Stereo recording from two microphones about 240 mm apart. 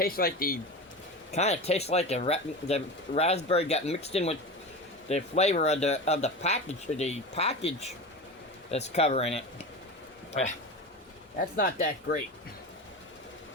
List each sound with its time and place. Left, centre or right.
0.0 s speech: left
1.3 s speech: left
11.3 s speech: left